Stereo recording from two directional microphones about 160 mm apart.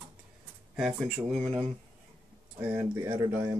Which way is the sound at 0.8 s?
5° right (ahead or behind).